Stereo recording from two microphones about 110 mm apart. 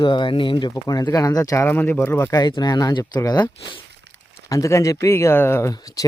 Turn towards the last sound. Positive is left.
turn(degrees=30)  # may be behind; listen again after turning